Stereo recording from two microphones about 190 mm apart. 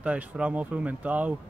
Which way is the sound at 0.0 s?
5° right (ahead or behind).